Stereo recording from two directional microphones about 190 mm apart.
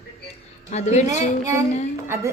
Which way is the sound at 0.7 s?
35° left (ahead or behind).